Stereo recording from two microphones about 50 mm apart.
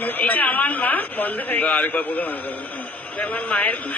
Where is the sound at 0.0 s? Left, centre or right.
Left.